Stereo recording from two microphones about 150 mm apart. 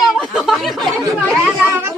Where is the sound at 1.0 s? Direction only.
10° right (ahead or behind).